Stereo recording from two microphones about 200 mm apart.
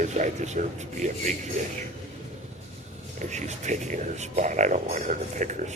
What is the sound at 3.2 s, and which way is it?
Speech, 35° right (ahead or behind).